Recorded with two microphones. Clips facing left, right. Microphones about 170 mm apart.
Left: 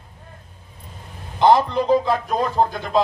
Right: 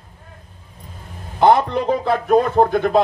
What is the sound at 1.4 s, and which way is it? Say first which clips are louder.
A man's voice: right 1 dB; 60° right (ahead or behind).